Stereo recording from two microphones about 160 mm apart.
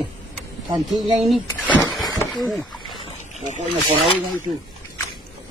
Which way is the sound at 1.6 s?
10° left (ahead or behind).